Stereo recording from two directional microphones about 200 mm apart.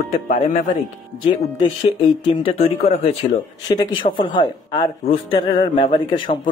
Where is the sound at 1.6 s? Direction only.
25° left (ahead or behind).